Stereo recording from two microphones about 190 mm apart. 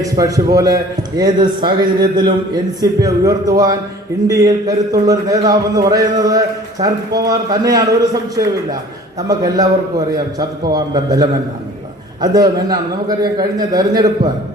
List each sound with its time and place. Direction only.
0.0 s a man's voice: 15° right (ahead or behind)